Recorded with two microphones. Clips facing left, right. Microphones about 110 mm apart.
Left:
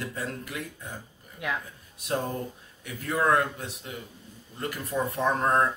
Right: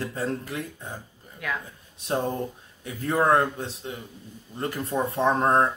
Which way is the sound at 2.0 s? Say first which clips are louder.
Right 3 dB; 30° right (ahead or behind).